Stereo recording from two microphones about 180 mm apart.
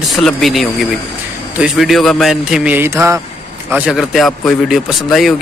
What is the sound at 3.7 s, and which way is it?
Speech, 5° right (ahead or behind).